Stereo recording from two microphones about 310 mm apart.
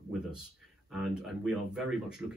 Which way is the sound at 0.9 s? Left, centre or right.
Centre.